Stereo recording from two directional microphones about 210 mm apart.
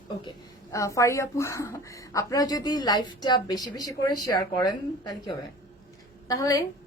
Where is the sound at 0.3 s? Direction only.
15° left (ahead or behind).